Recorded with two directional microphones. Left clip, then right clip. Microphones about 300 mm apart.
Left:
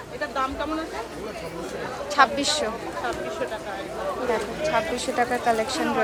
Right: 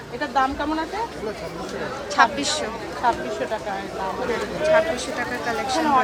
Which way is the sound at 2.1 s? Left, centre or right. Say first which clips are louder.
Right 1 dB; centre.